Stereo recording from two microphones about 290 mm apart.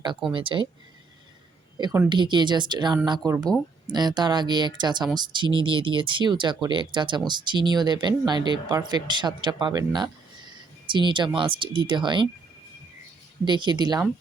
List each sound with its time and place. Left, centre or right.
0.3 s speech: centre
1.8 s speech: centre
13.4 s speech: centre